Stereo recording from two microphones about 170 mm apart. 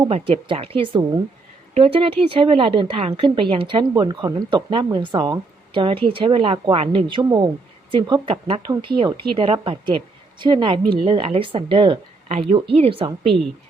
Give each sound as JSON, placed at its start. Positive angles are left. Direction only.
{"t": 0.1, "sound": "a woman's voice", "side_deg": -30}